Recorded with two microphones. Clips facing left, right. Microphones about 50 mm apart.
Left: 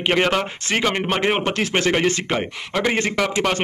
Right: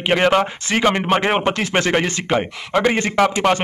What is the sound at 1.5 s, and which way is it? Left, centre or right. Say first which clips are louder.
Speech: right 2 dB; centre.